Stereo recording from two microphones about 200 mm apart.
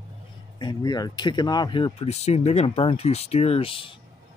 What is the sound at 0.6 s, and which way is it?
Speech, 20° left (ahead or behind).